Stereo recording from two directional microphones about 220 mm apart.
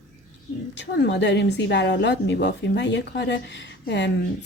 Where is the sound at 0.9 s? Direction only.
50° left (ahead or behind).